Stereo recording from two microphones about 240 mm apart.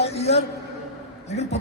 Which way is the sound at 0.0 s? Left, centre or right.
Left.